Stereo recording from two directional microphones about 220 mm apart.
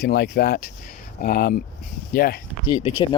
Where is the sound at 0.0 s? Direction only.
45° left (ahead or behind).